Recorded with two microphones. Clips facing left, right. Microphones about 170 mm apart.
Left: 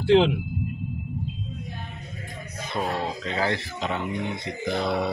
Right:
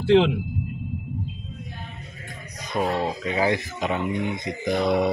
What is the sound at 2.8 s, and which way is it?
Speech, 10° right (ahead or behind).